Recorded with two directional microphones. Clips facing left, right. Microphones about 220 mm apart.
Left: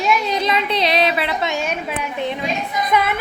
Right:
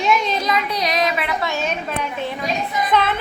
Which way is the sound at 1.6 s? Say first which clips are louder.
Even; 10° left (ahead or behind).